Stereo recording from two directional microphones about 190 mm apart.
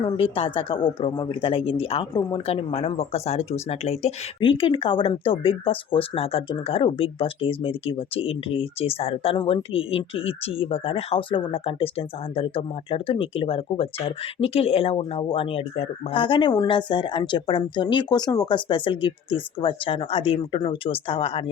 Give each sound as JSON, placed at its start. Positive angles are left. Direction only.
{"t": 0.0, "sound": "speech", "side_deg": 30}